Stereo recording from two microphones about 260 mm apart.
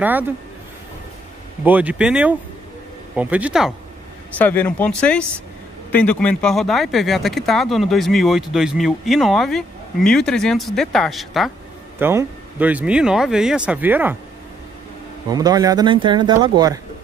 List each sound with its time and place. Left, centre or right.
0.0 s speech: centre
1.6 s speech: centre
15.2 s speech: centre